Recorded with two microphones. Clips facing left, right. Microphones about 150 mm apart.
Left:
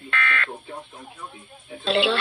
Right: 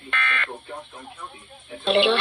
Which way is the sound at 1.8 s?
25° right (ahead or behind).